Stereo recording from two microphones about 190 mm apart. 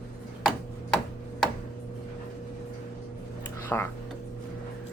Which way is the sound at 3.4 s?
10° left (ahead or behind).